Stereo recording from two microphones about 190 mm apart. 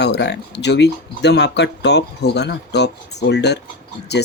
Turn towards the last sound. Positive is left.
turn(degrees=60)  # may be behind; listen again after turning